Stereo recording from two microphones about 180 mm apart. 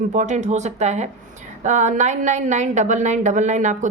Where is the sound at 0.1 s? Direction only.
40° right (ahead or behind).